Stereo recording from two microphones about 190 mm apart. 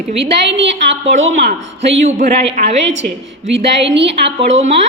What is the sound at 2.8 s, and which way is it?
A woman's voice, 75° right (ahead or behind).